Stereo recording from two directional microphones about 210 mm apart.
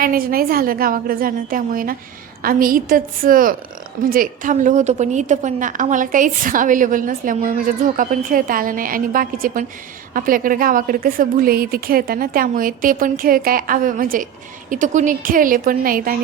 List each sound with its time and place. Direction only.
0.0 s a woman's voice: 45° right (ahead or behind)